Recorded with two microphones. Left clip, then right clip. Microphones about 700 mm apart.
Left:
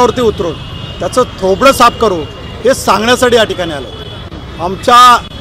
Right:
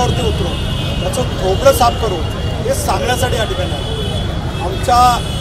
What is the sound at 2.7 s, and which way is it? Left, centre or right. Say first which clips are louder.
Speech: left 7 dB; left.